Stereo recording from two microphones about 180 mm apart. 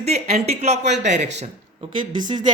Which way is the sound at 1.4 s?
30° right (ahead or behind).